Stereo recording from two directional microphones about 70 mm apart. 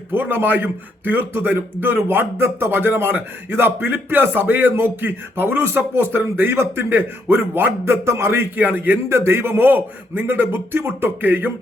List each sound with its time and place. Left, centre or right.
0.1 s a man's voice: right